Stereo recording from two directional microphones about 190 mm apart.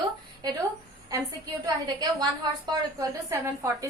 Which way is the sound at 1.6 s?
20° right (ahead or behind).